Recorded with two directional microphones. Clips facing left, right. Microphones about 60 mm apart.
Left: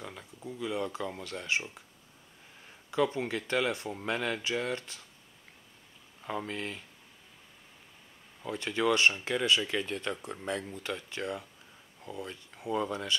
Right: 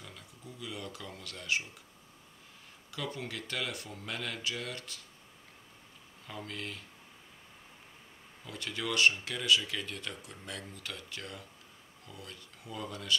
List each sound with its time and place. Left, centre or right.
0.0 s speech: left
2.9 s speech: left
6.2 s speech: left
8.5 s speech: left